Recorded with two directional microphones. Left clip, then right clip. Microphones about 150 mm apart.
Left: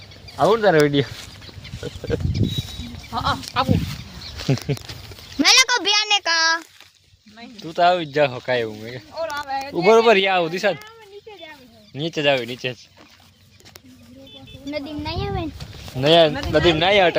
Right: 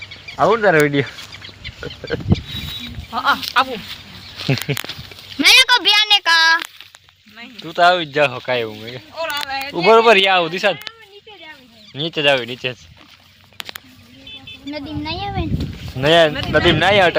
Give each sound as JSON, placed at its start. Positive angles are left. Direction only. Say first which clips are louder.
{"t": 0.3, "sound": "speech", "louder": "right 2 dB", "side_deg": -30}
{"t": 5.4, "sound": "a sound", "louder": "right 4 dB", "side_deg": 40}
{"t": 7.6, "sound": "speech", "louder": "right 4 dB", "side_deg": -10}
{"t": 9.1, "sound": "a sound", "louder": "right 3 dB", "side_deg": 90}
{"t": 9.7, "sound": "speech", "louder": "right 3 dB", "side_deg": 0}
{"t": 11.9, "sound": "speech", "louder": "right 4 dB", "side_deg": 0}
{"t": 14.7, "sound": "speech", "louder": "right 2 dB", "side_deg": 85}
{"t": 16.0, "sound": "speech", "louder": "right 2 dB", "side_deg": -5}